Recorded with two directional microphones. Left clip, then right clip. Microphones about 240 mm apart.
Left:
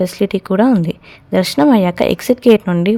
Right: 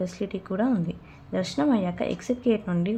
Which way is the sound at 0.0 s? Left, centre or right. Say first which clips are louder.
Left 14 dB; left.